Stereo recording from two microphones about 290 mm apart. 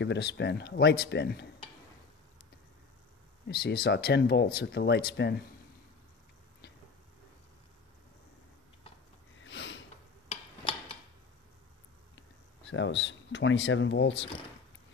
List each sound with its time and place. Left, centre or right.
0.0 s speech: left
3.4 s speech: left
9.4 s a sound: left
12.2 s speech: left